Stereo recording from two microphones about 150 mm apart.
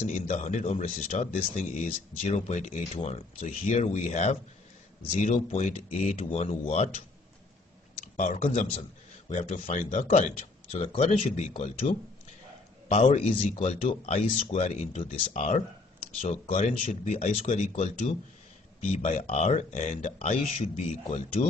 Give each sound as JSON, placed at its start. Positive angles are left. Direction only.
{"t": 0.0, "sound": "speech", "side_deg": 50}
{"t": 8.0, "sound": "speech", "side_deg": 60}
{"t": 11.5, "sound": "speech", "side_deg": 55}